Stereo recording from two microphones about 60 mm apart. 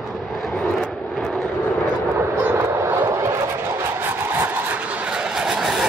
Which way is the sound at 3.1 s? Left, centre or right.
Right.